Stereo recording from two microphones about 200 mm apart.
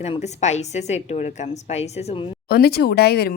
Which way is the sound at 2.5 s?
50° left (ahead or behind).